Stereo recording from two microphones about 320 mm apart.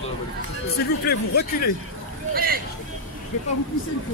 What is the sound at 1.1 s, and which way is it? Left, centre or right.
Speech, left.